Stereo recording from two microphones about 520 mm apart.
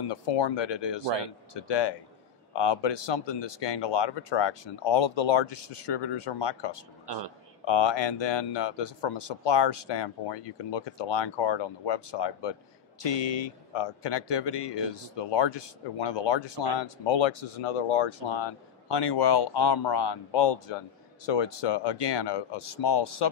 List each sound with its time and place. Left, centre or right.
0.1 s a man's voice: left